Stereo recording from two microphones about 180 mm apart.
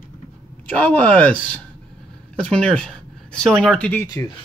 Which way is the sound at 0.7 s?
10° left (ahead or behind).